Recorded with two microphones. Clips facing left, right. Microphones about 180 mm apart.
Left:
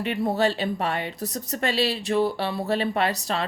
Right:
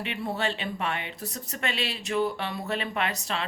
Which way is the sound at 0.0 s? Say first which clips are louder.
Left 7 dB; 40° left (ahead or behind).